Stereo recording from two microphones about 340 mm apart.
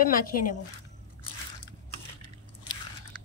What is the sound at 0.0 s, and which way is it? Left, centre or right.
Speech, left.